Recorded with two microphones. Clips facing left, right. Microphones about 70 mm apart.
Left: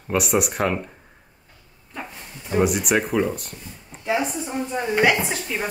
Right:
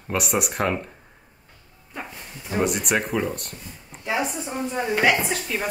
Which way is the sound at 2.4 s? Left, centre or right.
Centre.